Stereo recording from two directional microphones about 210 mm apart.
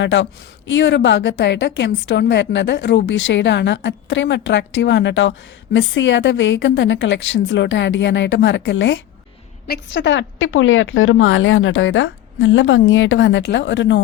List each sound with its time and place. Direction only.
0.0 s a woman's voice: 60° left (ahead or behind)